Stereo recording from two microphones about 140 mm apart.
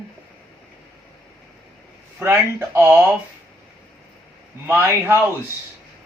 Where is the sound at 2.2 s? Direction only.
20° right (ahead or behind).